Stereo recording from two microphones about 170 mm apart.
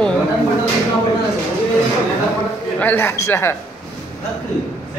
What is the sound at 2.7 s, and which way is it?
Speech, 10° left (ahead or behind).